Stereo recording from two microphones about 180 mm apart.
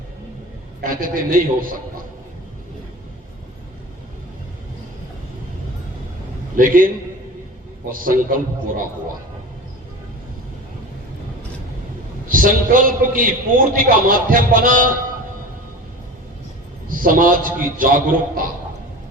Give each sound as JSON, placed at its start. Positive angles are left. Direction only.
{"t": 0.8, "sound": "a man's voice", "side_deg": -50}
{"t": 6.6, "sound": "a man's voice", "side_deg": -50}
{"t": 7.9, "sound": "a man's voice", "side_deg": -50}
{"t": 12.3, "sound": "a man's voice", "side_deg": -50}
{"t": 16.9, "sound": "a man's voice", "side_deg": -50}